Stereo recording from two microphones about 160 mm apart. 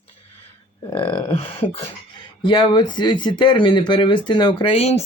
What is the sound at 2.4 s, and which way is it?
Speech, 25° left (ahead or behind).